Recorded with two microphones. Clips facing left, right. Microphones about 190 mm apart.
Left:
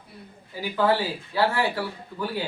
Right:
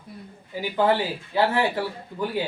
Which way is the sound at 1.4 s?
20° right (ahead or behind).